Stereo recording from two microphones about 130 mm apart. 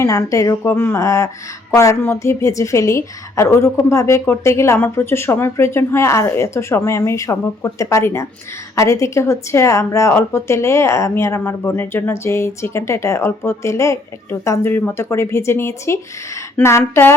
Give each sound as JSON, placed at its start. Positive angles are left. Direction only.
{"t": 0.0, "sound": "speech", "side_deg": 25}